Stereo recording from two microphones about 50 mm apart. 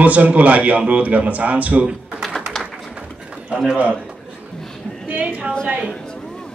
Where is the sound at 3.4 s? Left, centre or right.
Centre.